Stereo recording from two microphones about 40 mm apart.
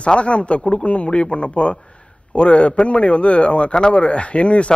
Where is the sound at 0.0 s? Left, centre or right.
Left.